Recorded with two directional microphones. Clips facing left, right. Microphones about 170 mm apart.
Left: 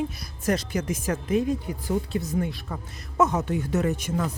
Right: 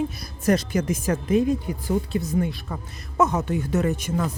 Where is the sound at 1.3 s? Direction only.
15° right (ahead or behind).